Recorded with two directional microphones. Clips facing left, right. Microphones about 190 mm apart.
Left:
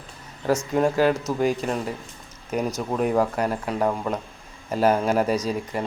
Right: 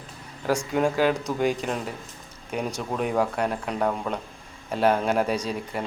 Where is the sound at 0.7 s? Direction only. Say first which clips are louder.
Left 2 dB; centre (ahead or behind).